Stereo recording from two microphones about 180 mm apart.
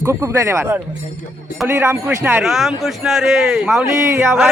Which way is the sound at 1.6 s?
15° right (ahead or behind).